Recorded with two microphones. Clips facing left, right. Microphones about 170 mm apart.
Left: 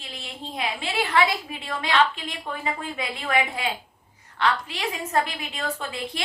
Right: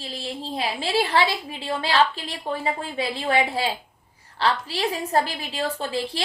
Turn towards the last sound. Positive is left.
turn(degrees=-30)  # may be behind; listen again after turning